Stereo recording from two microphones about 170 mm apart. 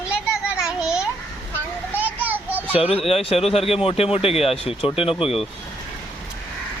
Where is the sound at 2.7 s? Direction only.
35° left (ahead or behind).